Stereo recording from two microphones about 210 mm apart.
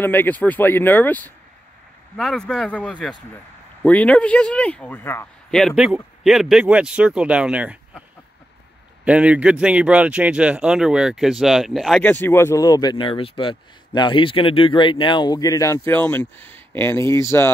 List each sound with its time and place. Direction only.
0.0 s speech: 10° left (ahead or behind); by 7.8 s 5° right (ahead or behind)
9.0 s speech: 5° right (ahead or behind); by 17.5 s 10° left (ahead or behind)